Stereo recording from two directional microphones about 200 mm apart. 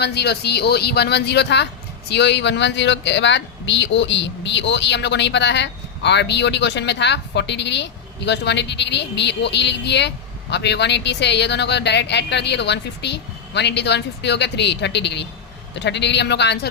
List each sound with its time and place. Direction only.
0.0 s speech: 55° left (ahead or behind)